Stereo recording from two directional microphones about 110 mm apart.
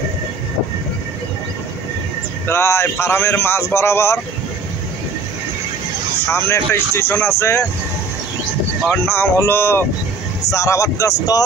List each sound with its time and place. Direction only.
2.4 s speech: 20° left (ahead or behind)
6.3 s speech: 25° left (ahead or behind)
9.0 s speech: 25° left (ahead or behind)